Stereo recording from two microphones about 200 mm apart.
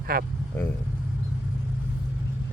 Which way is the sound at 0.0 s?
50° right (ahead or behind).